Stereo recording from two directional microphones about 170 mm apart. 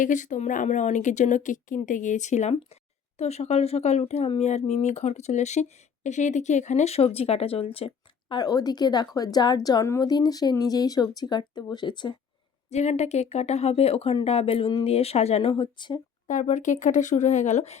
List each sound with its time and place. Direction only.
0.0 s speech: 50° left (ahead or behind)
8.4 s a woman's voice: 25° left (ahead or behind)
12.7 s speech: 40° left (ahead or behind)
16.2 s speech: 45° left (ahead or behind)